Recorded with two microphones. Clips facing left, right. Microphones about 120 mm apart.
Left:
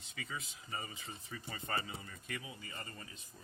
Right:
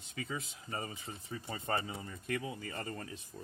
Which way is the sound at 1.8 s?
40° right (ahead or behind).